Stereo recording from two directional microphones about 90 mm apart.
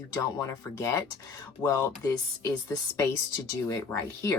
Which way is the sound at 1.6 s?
40° left (ahead or behind).